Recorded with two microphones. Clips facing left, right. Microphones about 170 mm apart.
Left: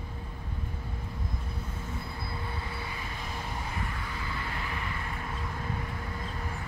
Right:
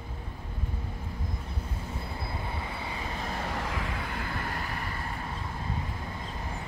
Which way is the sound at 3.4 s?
85° right.